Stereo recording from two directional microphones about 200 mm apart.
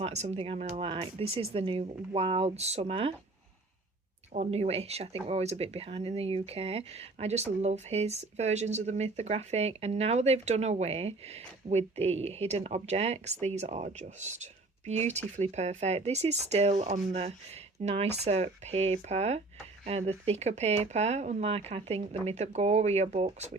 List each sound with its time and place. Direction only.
0.0 s speech: 35° right (ahead or behind)
4.3 s speech: 35° right (ahead or behind)